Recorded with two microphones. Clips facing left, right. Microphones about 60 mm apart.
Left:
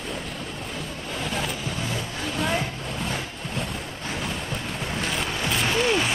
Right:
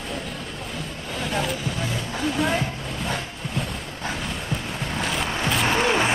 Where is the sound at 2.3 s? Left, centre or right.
Centre.